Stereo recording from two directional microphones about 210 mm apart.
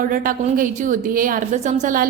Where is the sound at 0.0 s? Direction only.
40° right (ahead or behind).